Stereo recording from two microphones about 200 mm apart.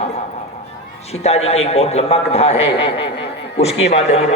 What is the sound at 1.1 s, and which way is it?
A man's voice, 30° left (ahead or behind).